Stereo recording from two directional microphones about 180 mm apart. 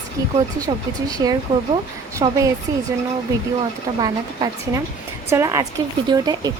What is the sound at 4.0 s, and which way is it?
Speech, 20° right (ahead or behind).